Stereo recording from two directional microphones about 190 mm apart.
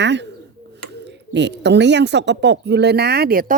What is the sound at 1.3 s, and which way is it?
Speech, 65° right (ahead or behind).